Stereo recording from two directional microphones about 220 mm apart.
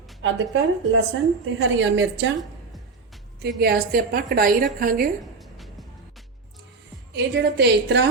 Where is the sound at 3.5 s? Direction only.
45° right (ahead or behind).